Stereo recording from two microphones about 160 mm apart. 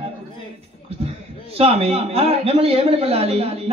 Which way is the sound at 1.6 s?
40° right (ahead or behind).